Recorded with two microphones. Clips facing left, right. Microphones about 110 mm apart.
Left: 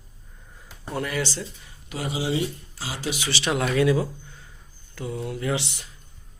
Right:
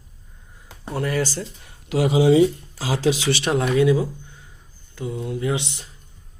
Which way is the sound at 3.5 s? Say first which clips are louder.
Right 3 dB; 20° right (ahead or behind).